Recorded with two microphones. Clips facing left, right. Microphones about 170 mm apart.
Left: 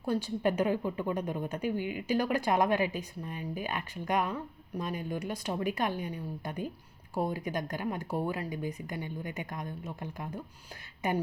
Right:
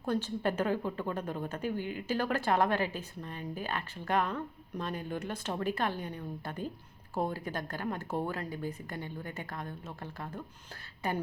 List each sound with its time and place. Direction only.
0.0 s a woman's voice: 10° left (ahead or behind)